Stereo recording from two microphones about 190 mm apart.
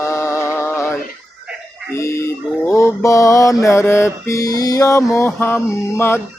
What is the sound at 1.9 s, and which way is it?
Mantra, 15° left (ahead or behind).